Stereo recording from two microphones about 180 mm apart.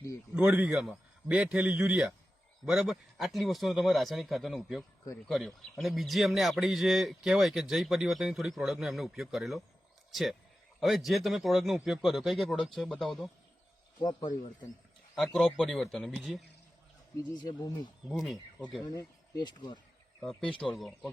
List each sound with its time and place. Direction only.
0.3 s a man's voice: 5° right (ahead or behind)
14.0 s speech: 25° left (ahead or behind)
15.1 s a man's voice: centre (ahead or behind)
17.2 s speech: 20° left (ahead or behind)
18.1 s a man's voice: centre (ahead or behind)
18.8 s speech: 20° left (ahead or behind)
20.2 s a man's voice: 5° left (ahead or behind)